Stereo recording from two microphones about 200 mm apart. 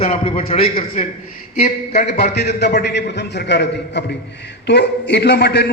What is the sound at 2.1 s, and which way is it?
A man's voice, 55° left (ahead or behind).